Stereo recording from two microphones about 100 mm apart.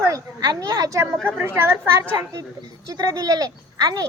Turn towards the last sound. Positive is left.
turn(degrees=-40)  # may be behind; listen again after turning